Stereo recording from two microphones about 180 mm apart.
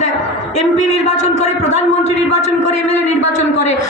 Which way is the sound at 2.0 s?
40° left (ahead or behind).